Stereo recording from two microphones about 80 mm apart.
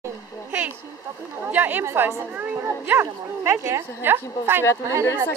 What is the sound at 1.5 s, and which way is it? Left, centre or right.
Speech, right.